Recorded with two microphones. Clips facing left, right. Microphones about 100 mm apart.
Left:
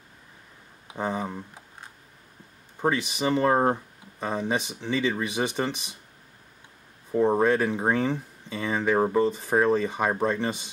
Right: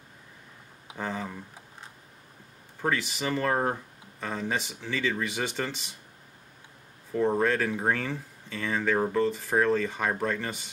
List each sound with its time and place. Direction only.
0.9 s speech: 20° left (ahead or behind)
2.8 s speech: 20° left (ahead or behind)
7.1 s speech: 20° left (ahead or behind)